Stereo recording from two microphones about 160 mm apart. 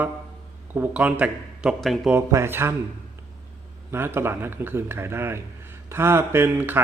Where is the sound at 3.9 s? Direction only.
15° right (ahead or behind).